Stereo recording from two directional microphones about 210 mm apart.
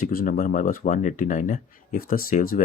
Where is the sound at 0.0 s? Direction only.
40° left (ahead or behind).